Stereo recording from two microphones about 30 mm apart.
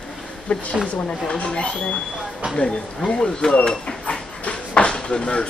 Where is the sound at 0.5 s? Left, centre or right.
Left.